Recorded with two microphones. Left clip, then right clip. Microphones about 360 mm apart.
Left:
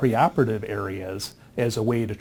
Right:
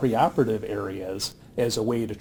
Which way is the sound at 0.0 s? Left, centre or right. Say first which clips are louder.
Left 1 dB; left.